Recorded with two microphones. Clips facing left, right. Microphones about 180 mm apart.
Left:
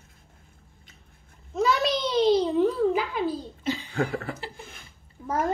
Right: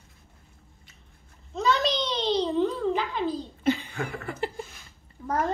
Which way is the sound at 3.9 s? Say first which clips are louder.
Left 6 dB; 35° left (ahead or behind).